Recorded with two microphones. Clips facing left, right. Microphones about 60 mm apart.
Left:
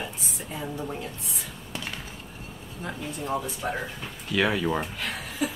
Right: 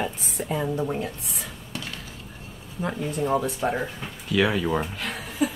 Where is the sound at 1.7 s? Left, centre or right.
Centre.